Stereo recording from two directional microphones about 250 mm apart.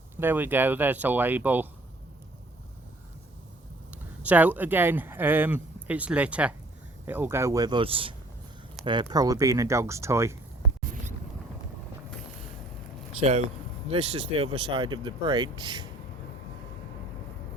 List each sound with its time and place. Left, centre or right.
0.2 s speech: centre
4.2 s speech: centre
13.9 s speech: right